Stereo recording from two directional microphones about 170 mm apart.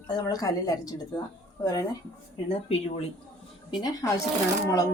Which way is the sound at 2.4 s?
35° left (ahead or behind).